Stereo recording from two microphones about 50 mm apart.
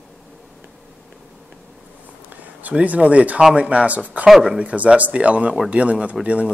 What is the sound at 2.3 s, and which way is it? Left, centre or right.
Speech, right.